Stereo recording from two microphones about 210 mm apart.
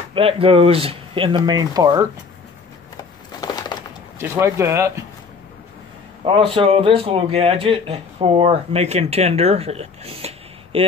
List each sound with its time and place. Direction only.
0.1 s a man's voice: 25° right (ahead or behind)
3.0 s a sound: 20° left (ahead or behind)
4.2 s speech: 15° right (ahead or behind)
6.2 s a man's voice: 25° right (ahead or behind)